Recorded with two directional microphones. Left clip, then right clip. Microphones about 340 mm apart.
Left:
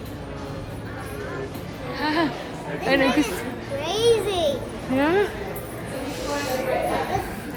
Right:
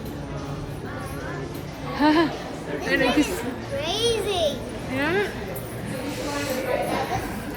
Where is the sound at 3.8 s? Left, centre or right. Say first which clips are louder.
Left 4 dB; centre.